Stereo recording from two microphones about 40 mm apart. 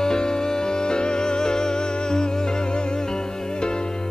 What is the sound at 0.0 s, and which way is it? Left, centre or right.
Music, centre.